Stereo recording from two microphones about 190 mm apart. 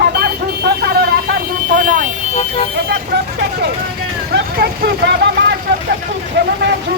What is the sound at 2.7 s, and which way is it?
Vehicle, 60° right (ahead or behind).